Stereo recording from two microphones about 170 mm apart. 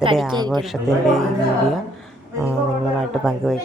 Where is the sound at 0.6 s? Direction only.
Centre (ahead or behind).